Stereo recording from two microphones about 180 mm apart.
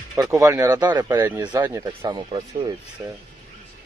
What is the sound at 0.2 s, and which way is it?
Speech, 15° right (ahead or behind).